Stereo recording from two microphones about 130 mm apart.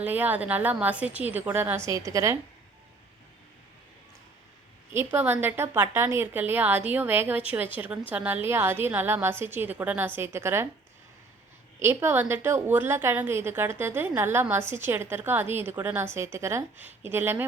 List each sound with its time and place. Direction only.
0.0 s a woman's voice: 15° right (ahead or behind)
4.9 s a woman's voice: 15° right (ahead or behind)
11.8 s a woman's voice: 20° right (ahead or behind)